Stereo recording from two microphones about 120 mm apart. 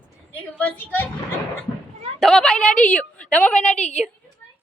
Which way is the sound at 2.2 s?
5° left (ahead or behind).